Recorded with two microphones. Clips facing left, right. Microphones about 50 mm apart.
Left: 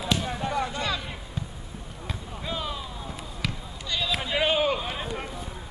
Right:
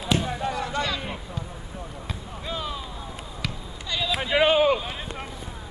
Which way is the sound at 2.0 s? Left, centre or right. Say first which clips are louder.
Left 2 dB; centre.